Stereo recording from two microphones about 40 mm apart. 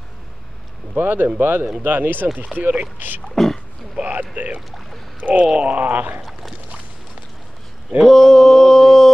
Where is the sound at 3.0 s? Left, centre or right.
Right.